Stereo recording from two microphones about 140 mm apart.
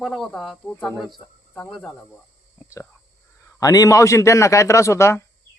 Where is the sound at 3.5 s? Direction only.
25° left (ahead or behind).